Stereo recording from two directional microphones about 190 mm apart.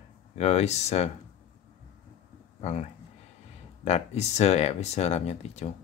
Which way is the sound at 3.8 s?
35° left (ahead or behind).